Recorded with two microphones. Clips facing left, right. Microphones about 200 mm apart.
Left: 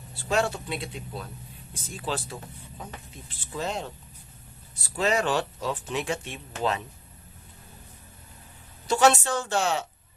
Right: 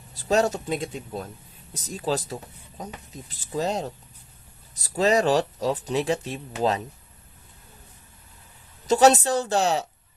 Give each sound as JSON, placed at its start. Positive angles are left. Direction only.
{"t": 0.1, "sound": "speech", "side_deg": -40}
{"t": 8.9, "sound": "speech", "side_deg": -40}